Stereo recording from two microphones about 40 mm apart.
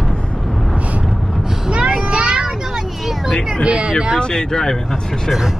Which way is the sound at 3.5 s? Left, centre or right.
Right.